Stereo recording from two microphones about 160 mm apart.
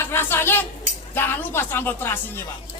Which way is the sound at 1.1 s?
15° left (ahead or behind).